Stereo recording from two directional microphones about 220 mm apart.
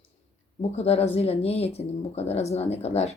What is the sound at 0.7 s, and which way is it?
Speech, 30° left (ahead or behind).